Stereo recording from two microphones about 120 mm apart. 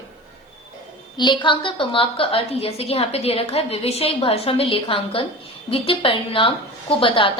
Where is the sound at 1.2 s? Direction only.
40° left (ahead or behind).